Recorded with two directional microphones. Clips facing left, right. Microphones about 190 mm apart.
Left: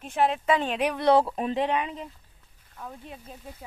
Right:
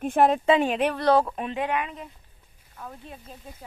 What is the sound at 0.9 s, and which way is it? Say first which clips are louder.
Speech: left 3 dB; 25° left (ahead or behind).